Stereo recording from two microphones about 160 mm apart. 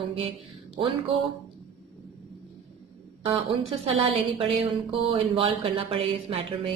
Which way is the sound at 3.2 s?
35° right (ahead or behind).